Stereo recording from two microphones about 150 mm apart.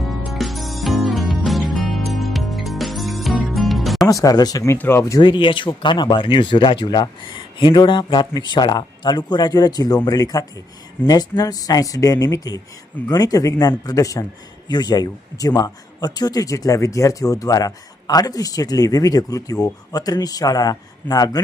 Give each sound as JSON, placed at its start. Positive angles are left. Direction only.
{"t": 0.2, "sound": "music", "side_deg": 0}
{"t": 4.0, "sound": "a man's voice", "side_deg": 25}
{"t": 5.2, "sound": "a man's voice", "side_deg": 35}